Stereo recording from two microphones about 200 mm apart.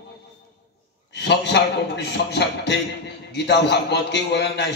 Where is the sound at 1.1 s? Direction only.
55° left (ahead or behind).